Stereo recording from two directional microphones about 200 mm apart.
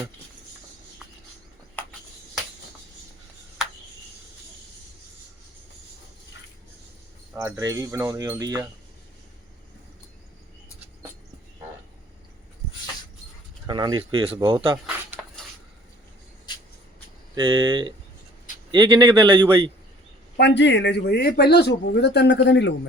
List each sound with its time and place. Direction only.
1.7 s a sound: 5° left (ahead or behind)
7.3 s speech: 15° right (ahead or behind)
13.7 s speech: 20° right (ahead or behind)
17.6 s speech: 25° right (ahead or behind)
20.3 s speech: 60° left (ahead or behind)